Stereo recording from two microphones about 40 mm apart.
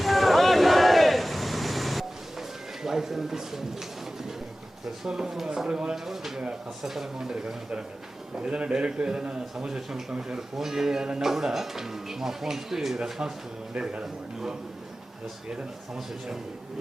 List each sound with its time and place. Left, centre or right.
0.0 s vehicle: centre
2.8 s a man's voice: centre
8.4 s a man's voice: right; by 13.3 s centre
13.7 s a man's voice: right
16.0 s a man's voice: centre